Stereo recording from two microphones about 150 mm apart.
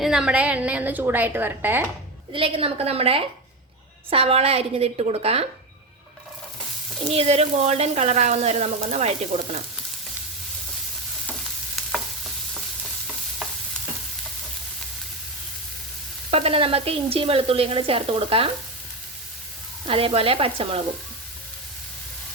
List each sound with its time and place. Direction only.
0.0 s a woman's voice: 5° right (ahead or behind)
2.3 s speech: 40° right (ahead or behind)
7.0 s speech: 40° right (ahead or behind)
16.3 s speech: 40° right (ahead or behind)
19.9 s speech: 40° right (ahead or behind)